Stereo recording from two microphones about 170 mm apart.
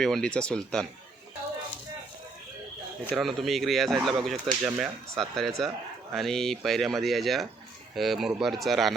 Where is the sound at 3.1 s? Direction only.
Centre (ahead or behind).